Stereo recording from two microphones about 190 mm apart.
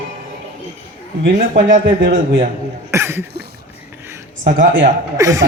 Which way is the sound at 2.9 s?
15° right (ahead or behind).